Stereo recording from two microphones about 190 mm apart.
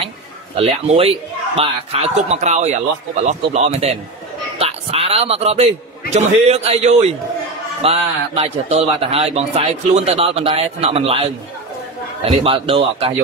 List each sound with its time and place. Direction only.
0.6 s a man's voice: 30° right (ahead or behind)
12.4 s a man's voice: 30° right (ahead or behind)